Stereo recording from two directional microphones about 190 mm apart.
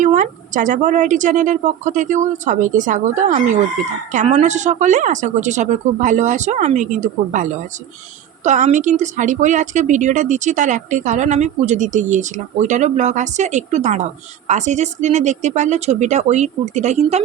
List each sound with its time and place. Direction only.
0.0 s speech: 40° right (ahead or behind)